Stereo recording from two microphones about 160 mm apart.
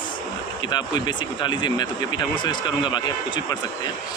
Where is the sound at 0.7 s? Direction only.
25° left (ahead or behind).